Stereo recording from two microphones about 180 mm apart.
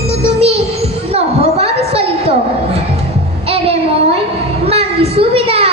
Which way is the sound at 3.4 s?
35° right (ahead or behind).